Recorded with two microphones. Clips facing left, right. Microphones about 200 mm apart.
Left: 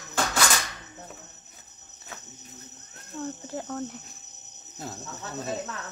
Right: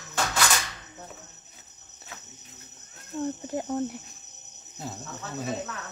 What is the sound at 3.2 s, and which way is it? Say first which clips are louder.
Speech: right 4 dB; 15° right (ahead or behind).